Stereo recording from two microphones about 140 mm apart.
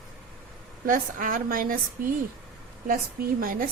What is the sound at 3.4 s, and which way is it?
Speech, 90° right.